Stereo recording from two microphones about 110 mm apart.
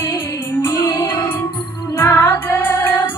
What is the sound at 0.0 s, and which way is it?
Music, 20° left (ahead or behind).